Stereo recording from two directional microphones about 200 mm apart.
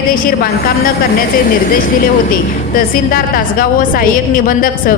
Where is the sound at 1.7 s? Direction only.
45° left (ahead or behind).